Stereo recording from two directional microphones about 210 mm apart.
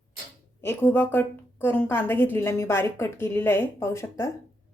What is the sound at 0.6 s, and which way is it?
A woman's voice, 10° left (ahead or behind).